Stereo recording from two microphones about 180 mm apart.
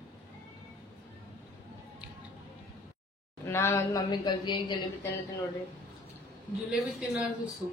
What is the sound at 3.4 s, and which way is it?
A woman's voice, 15° left (ahead or behind).